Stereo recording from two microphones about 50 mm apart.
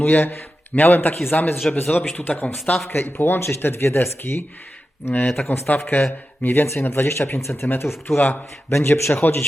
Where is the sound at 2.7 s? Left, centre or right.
Left.